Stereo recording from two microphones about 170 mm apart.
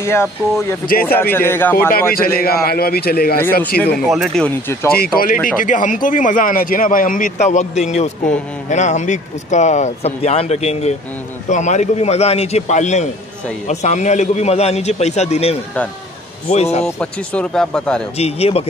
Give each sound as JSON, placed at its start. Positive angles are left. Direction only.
{"t": 0.0, "sound": "speech", "side_deg": 15}
{"t": 2.1, "sound": "a man's voice", "side_deg": 60}
{"t": 4.0, "sound": "speech", "side_deg": 0}
{"t": 4.9, "sound": "a man's voice", "side_deg": 60}
{"t": 16.8, "sound": "speech", "side_deg": 5}
{"t": 18.1, "sound": "a man's voice", "side_deg": 35}